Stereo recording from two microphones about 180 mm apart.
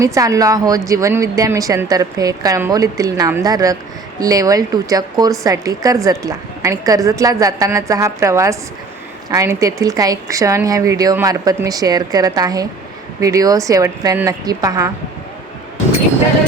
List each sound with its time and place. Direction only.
0.0 s speech: 20° right (ahead or behind)